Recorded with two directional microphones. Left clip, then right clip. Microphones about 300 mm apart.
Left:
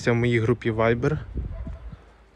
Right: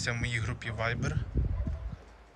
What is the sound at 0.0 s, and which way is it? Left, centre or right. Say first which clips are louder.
Speech: left 11 dB; centre.